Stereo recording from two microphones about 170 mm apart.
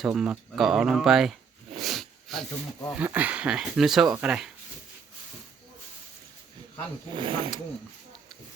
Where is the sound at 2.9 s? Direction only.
10° right (ahead or behind).